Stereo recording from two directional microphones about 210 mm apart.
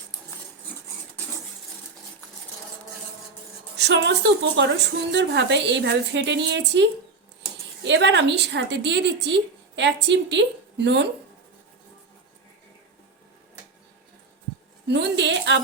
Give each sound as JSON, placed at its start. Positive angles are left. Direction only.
{"t": 3.8, "sound": "a woman's voice", "side_deg": -55}
{"t": 7.9, "sound": "a woman's voice", "side_deg": -55}
{"t": 14.8, "sound": "a woman's voice", "side_deg": -55}